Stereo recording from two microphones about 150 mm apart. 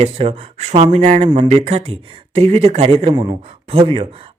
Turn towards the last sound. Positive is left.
turn(degrees=-40)  # may be behind; listen again after turning